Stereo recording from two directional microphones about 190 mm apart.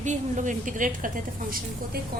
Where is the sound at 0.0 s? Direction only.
40° right (ahead or behind).